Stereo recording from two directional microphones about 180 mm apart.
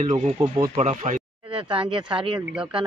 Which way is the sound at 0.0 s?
40° right (ahead or behind).